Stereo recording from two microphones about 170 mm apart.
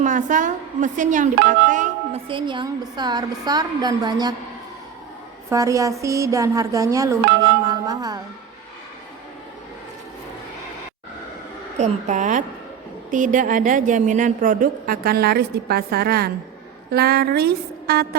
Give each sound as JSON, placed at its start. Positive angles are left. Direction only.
{"t": 0.0, "sound": "a woman's voice", "side_deg": -45}
{"t": 2.2, "sound": "a woman's voice", "side_deg": -30}
{"t": 5.5, "sound": "a woman's voice", "side_deg": -20}
{"t": 11.8, "sound": "a woman's voice", "side_deg": -45}